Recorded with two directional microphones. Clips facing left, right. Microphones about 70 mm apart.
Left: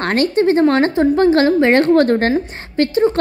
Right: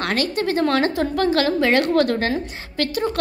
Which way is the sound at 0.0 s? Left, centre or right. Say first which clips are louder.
Left 7 dB; left.